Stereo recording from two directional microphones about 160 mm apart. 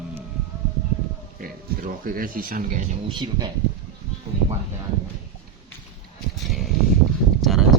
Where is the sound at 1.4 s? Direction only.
65° right (ahead or behind).